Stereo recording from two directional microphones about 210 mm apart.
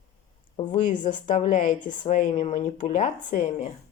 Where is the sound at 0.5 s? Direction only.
30° left (ahead or behind).